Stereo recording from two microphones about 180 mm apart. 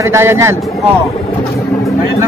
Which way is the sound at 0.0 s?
15° right (ahead or behind).